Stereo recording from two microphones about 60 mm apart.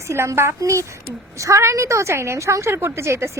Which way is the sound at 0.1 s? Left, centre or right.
Right.